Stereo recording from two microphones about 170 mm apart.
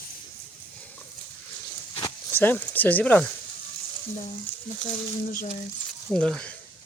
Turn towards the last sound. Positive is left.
turn(degrees=5)  # may be behind; listen again after turning